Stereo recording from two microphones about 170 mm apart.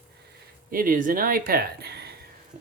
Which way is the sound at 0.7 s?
55° right (ahead or behind).